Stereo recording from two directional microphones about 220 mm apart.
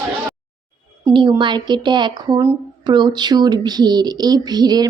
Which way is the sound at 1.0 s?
20° right (ahead or behind).